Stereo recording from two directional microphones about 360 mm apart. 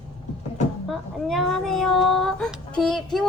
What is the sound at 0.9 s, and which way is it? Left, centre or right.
Speech, centre.